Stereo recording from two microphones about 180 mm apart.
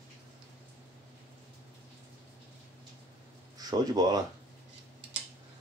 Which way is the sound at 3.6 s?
20° right (ahead or behind).